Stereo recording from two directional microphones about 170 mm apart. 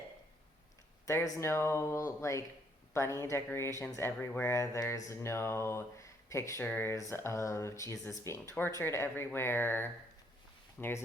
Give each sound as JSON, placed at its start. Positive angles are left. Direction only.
{"t": 1.0, "sound": "speech", "side_deg": 15}